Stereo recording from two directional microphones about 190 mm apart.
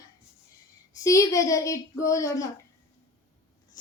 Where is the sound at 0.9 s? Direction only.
15° left (ahead or behind).